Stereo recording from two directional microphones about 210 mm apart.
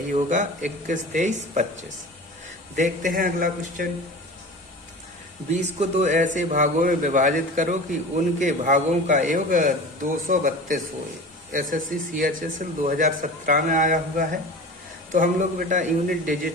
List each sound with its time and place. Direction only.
0.1 s speech: 40° right (ahead or behind)
2.7 s speech: 35° right (ahead or behind)
5.5 s speech: 35° right (ahead or behind)